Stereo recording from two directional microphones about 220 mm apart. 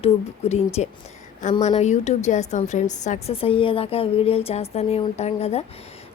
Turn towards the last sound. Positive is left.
turn(degrees=30)  # may be behind; listen again after turning